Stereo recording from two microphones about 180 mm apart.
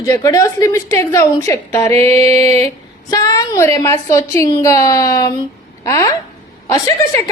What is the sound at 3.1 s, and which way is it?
A woman's voice, 20° left (ahead or behind).